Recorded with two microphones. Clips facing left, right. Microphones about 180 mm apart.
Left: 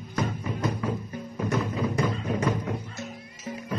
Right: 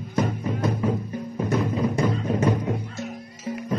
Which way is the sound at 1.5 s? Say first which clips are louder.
Right 4 dB; 30° right (ahead or behind).